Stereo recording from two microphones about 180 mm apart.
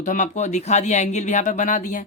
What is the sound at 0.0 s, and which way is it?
Speech, 45° left (ahead or behind).